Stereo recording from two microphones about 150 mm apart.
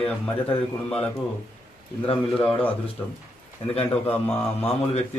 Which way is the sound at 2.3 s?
5° left (ahead or behind).